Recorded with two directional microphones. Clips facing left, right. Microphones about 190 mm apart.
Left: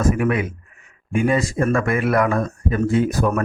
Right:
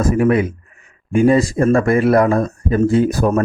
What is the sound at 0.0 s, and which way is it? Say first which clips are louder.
A man's voice: right 5 dB; 35° right (ahead or behind).